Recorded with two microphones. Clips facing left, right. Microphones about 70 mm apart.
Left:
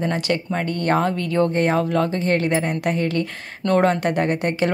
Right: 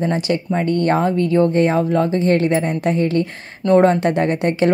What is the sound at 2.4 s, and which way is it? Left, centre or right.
Speech, right.